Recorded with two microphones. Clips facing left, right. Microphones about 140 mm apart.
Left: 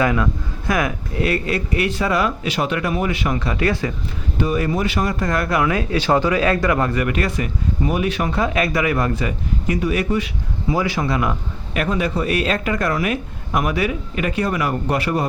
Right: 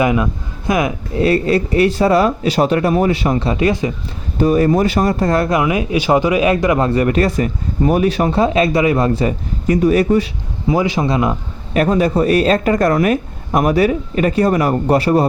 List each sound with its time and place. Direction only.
0.0 s speech: 20° right (ahead or behind)
4.4 s speech: 40° right (ahead or behind)
10.7 s speech: 20° right (ahead or behind)
11.7 s speech: 35° right (ahead or behind)